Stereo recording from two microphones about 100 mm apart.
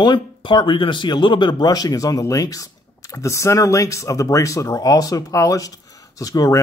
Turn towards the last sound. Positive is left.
turn(degrees=40)  # may be behind; listen again after turning